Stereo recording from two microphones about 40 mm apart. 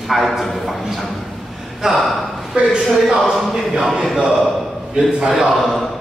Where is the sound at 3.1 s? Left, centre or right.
Centre.